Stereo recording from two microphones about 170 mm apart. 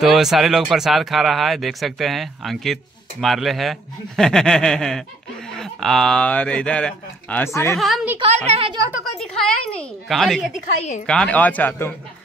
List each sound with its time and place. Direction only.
0.0 s speech: centre (ahead or behind); by 7.7 s 15° left (ahead or behind)
7.7 s speech: centre (ahead or behind)
8.5 s a woman's voice: 30° right (ahead or behind)
8.9 s speech: centre (ahead or behind)